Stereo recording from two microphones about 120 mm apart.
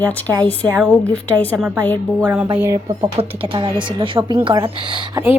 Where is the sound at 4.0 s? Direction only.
45° right (ahead or behind).